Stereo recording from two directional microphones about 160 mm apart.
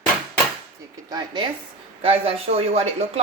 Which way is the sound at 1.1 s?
25° right (ahead or behind).